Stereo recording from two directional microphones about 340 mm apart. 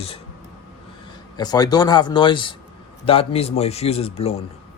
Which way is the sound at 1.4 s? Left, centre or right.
Centre.